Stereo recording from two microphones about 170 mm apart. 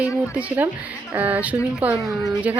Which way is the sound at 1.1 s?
10° right (ahead or behind).